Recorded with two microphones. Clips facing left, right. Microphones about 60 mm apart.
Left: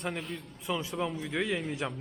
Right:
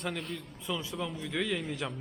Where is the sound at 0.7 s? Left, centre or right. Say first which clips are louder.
Left 3 dB; left.